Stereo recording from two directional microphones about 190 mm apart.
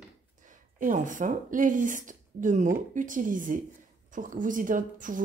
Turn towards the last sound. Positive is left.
turn(degrees=-45)  # may be behind; listen again after turning